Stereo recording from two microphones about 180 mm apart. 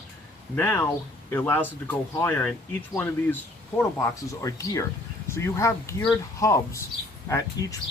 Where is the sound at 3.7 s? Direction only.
15° left (ahead or behind).